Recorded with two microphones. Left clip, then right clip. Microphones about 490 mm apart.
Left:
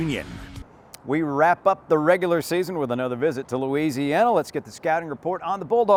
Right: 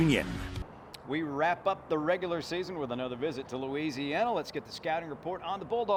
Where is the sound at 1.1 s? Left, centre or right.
Left.